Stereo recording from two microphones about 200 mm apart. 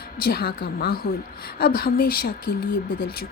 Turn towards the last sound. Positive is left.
turn(degrees=45)  # may be behind; listen again after turning